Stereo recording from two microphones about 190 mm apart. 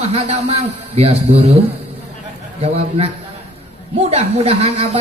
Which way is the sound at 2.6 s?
35° right (ahead or behind).